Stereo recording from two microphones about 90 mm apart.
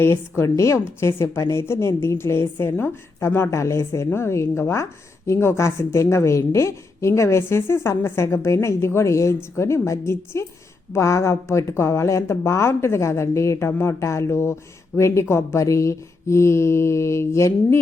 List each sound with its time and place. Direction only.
0.0 s a woman's voice: 30° left (ahead or behind)